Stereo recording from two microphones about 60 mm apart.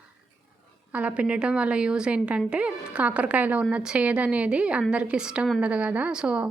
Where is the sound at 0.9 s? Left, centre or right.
Right.